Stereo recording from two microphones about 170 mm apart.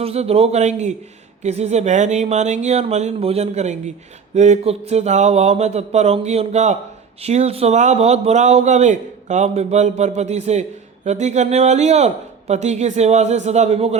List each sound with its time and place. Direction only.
0.0 s speech: 35° right (ahead or behind)